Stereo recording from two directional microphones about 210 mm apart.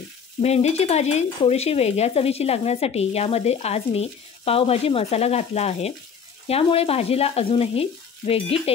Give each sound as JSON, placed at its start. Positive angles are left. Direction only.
{"t": 0.4, "sound": "stir", "side_deg": 30}